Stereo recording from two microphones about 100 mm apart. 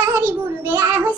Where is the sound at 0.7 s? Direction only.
20° right (ahead or behind).